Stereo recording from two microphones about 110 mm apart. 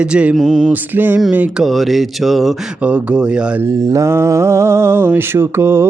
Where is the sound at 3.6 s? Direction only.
30° right (ahead or behind).